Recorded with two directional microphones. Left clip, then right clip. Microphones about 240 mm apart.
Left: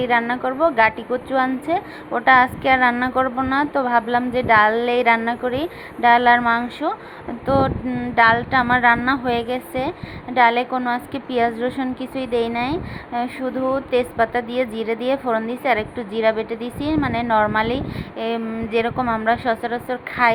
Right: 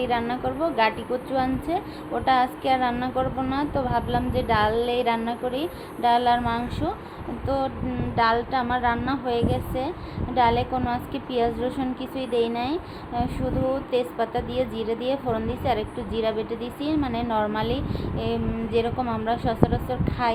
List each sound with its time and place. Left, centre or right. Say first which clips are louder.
0.0 s a woman's voice: left 6 dB; centre